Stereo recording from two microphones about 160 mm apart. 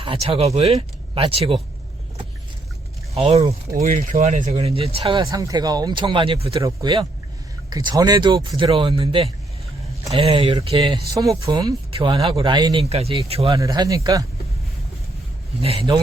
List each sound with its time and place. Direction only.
0.0 s speech: 35° right (ahead or behind)
3.2 s speech: 40° right (ahead or behind)
3.8 s speech: 55° right (ahead or behind); by 5.2 s 35° right (ahead or behind)
5.2 s speech: 20° right (ahead or behind); by 10.9 s 35° right (ahead or behind)
11.1 s speech: 20° right (ahead or behind)
11.9 s speech: 35° right (ahead or behind)
12.8 s speech: 40° right (ahead or behind)
13.6 s speech: 20° right (ahead or behind)
15.6 s speech: 35° right (ahead or behind)